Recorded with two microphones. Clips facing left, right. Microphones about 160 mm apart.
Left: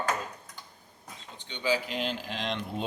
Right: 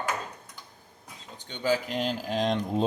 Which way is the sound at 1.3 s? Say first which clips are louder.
Right 2 dB; 45° right (ahead or behind).